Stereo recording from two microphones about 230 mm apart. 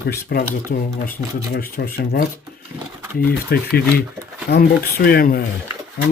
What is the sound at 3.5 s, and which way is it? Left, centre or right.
Speech, left.